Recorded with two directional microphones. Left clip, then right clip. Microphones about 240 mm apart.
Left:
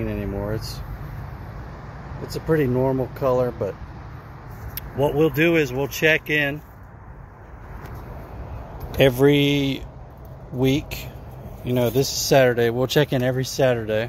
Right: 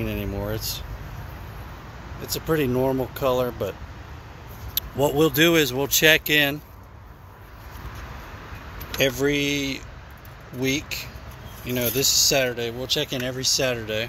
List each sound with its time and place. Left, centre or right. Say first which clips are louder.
0.0 s a sound: left 1 dB; centre
2.4 s speech: left 2 dB; centre
4.9 s speech: even; right
8.9 s speech: left 5 dB; centre